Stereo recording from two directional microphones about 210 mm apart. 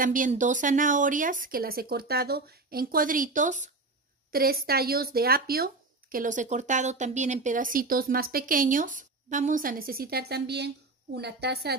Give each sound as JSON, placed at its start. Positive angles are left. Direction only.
{"t": 0.0, "sound": "speech", "side_deg": -40}